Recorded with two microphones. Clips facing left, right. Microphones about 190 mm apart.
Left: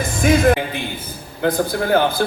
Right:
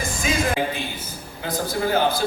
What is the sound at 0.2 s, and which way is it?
Music, 55° left (ahead or behind).